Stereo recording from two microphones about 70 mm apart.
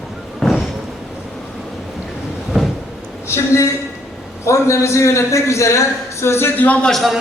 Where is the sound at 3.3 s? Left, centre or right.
Left.